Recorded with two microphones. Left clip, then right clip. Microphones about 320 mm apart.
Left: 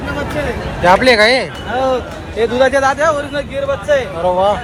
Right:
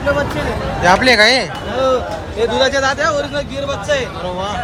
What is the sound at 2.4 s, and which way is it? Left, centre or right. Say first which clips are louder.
Speech: left 2 dB; centre.